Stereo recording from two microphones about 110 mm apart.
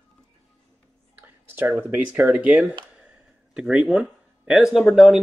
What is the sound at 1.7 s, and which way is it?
Speech, 15° right (ahead or behind).